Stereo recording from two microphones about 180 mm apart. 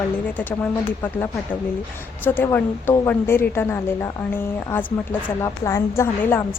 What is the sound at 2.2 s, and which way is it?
A woman's voice, 10° left (ahead or behind).